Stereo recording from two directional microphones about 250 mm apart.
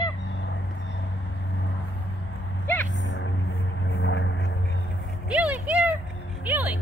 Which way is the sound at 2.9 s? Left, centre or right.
Left.